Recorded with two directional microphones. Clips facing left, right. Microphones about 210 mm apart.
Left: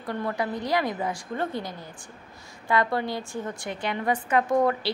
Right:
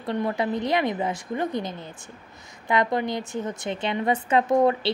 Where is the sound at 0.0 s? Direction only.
25° right (ahead or behind).